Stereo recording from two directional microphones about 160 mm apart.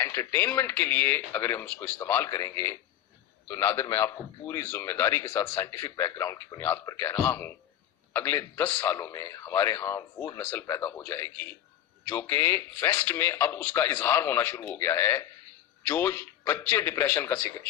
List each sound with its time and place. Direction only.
0.0 s a man's voice: 15° left (ahead or behind)